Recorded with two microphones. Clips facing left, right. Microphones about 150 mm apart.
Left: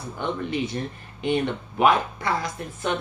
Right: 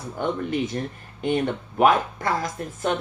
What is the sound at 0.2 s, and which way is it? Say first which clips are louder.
Speech: right 2 dB; 45° right (ahead or behind).